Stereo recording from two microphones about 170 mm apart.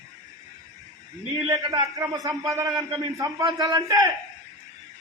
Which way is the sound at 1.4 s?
20° right (ahead or behind).